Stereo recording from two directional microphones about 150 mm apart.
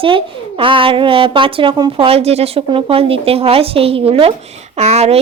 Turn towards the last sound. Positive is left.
turn(degrees=-45)  # may be behind; listen again after turning